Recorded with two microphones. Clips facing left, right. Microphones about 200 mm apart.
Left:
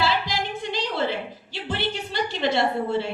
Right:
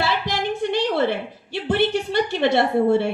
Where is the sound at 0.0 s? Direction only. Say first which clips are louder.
Right 2 dB; 60° right (ahead or behind).